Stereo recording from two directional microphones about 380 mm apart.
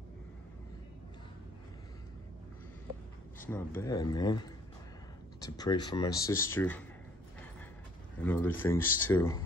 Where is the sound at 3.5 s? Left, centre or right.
Centre.